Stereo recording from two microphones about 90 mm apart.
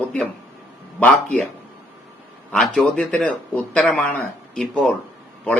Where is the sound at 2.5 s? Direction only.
10° left (ahead or behind).